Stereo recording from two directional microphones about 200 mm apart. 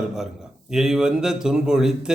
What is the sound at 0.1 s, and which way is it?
Speech, centre (ahead or behind).